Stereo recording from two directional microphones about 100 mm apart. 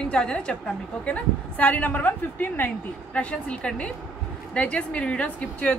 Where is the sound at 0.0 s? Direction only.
10° left (ahead or behind).